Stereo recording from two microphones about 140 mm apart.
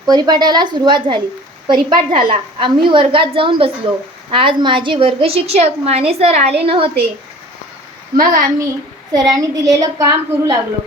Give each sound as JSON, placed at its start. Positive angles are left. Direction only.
{"t": 0.0, "sound": "a woman's voice", "side_deg": -30}
{"t": 8.1, "sound": "a woman's voice", "side_deg": -85}
{"t": 9.1, "sound": "a woman's voice", "side_deg": -25}